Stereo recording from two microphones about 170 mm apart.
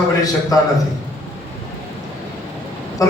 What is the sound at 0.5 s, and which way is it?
Speech, 20° left (ahead or behind).